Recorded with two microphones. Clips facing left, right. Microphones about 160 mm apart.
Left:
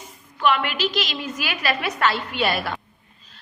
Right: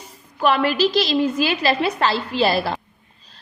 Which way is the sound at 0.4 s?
35° right (ahead or behind).